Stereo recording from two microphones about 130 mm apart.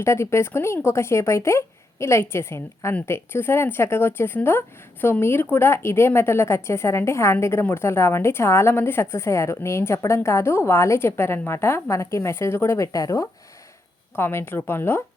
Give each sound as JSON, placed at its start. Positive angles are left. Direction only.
{"t": 0.0, "sound": "a woman's voice", "side_deg": 20}